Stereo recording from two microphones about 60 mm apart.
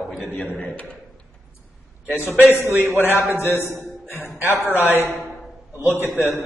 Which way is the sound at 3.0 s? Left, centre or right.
Left.